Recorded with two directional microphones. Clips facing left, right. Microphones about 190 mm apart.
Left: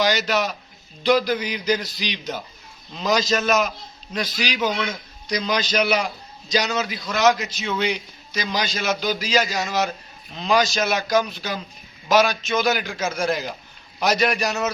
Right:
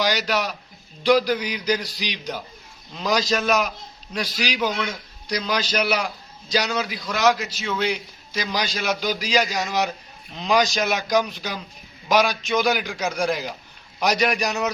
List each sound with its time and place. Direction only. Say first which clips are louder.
0.0 s a man's voice: left 2 dB; 10° right (ahead or behind)
9.5 s a man's voice: even; centre (ahead or behind)
10.3 s a man's voice: even; 15° right (ahead or behind)